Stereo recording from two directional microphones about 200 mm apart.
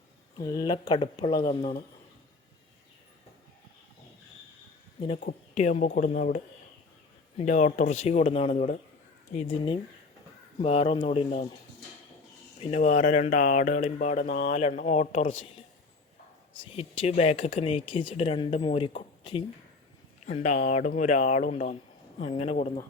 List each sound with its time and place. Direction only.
0.3 s speech: 20° left (ahead or behind)
5.2 s speech: 35° left (ahead or behind)
10.6 s speech: 30° left (ahead or behind)
12.5 s speech: 30° left (ahead or behind)
16.7 s speech: 30° left (ahead or behind)
20.2 s speech: 35° left (ahead or behind)